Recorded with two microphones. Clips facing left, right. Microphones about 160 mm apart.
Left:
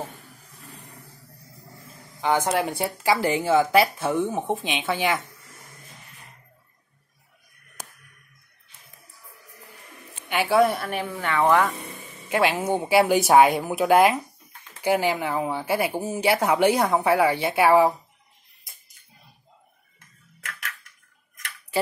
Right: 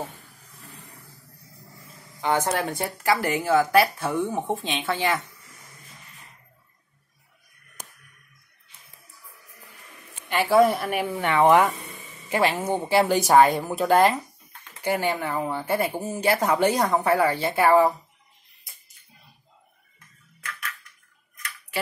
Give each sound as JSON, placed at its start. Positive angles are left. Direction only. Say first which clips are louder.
{"t": 2.2, "sound": "a woman's voice", "louder": "left 1 dB", "side_deg": 15}
{"t": 10.3, "sound": "a woman's voice", "louder": "right 1 dB", "side_deg": 0}
{"t": 11.1, "sound": "speech", "louder": "right 2 dB", "side_deg": -20}
{"t": 12.3, "sound": "a woman's voice", "louder": "left 1 dB", "side_deg": 0}